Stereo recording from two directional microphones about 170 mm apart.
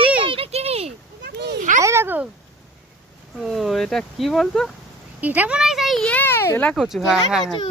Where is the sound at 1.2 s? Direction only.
75° right (ahead or behind).